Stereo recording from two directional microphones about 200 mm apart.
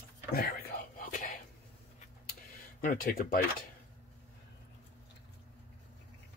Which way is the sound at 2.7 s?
45° left (ahead or behind).